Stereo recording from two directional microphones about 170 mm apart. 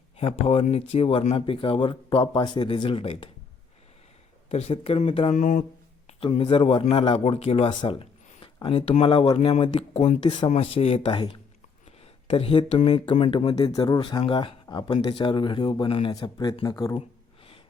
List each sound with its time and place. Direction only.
0.2 s speech: 35° left (ahead or behind)
4.4 s speech: 35° left (ahead or behind)
6.1 s speech: 30° left (ahead or behind)
13.6 s speech: 20° left (ahead or behind)